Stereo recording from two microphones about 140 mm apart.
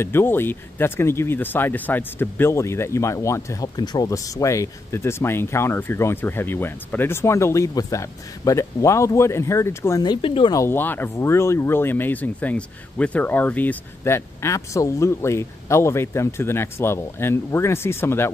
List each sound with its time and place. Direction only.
0.0 s speech: 15° left (ahead or behind)
10.2 s speech: 40° left (ahead or behind)
10.5 s speech: 20° left (ahead or behind)